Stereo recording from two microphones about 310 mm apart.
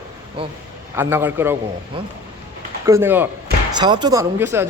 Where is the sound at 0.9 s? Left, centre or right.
Centre.